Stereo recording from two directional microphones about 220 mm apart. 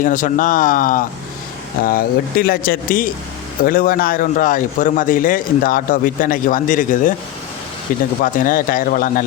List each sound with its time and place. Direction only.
0.0 s speech: 35° left (ahead or behind)
8.2 s speech: 40° left (ahead or behind)